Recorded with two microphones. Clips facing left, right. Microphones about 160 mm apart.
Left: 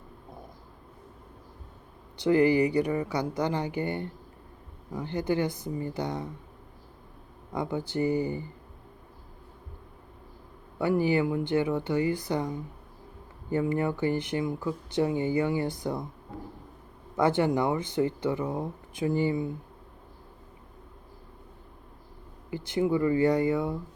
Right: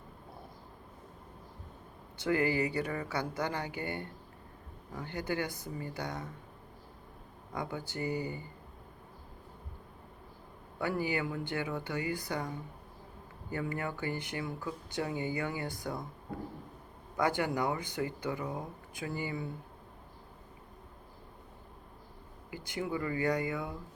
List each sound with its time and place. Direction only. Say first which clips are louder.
2.2 s speech: left 8 dB; 20° left (ahead or behind)
7.5 s speech: left 8 dB; 20° left (ahead or behind)
10.8 s speech: left 8 dB; 20° left (ahead or behind)
17.2 s speech: left 7 dB; 25° left (ahead or behind)
22.4 s speech: left 10 dB; 20° left (ahead or behind)